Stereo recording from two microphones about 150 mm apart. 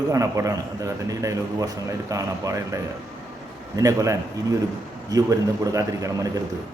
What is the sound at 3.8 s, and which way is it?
A man's voice, 20° right (ahead or behind).